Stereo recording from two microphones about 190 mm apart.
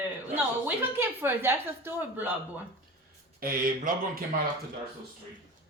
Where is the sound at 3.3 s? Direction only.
50° right (ahead or behind).